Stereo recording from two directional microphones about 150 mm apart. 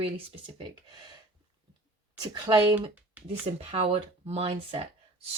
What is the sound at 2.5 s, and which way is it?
Speech, 30° right (ahead or behind).